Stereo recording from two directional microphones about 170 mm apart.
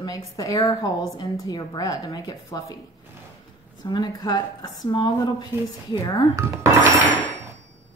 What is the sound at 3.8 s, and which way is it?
A woman's voice, 25° left (ahead or behind).